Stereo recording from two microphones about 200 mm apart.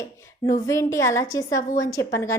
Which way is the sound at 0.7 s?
15° left (ahead or behind).